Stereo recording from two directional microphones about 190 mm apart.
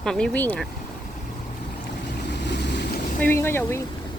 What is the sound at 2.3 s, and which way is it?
Boat, 65° left (ahead or behind).